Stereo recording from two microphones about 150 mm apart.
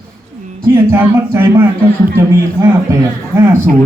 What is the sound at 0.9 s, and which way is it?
A man's voice, 15° right (ahead or behind).